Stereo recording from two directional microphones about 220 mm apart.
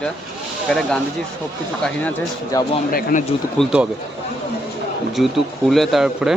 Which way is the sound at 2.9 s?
40° left (ahead or behind).